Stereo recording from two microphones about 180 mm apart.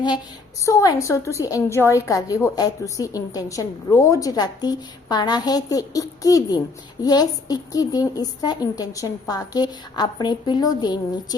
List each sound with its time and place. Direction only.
0.6 s a woman's voice: 15° left (ahead or behind)